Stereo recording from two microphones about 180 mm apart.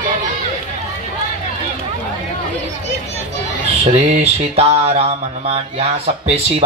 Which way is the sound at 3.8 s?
35° right (ahead or behind).